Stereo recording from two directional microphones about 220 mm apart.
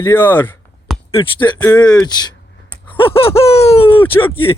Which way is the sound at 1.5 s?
15° left (ahead or behind).